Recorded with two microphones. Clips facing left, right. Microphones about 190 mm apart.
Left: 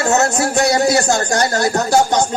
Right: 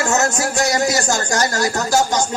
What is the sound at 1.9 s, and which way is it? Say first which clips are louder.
Speech: left 3 dB; 60° left (ahead or behind).